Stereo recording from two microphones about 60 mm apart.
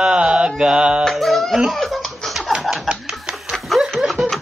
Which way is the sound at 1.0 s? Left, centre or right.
Centre.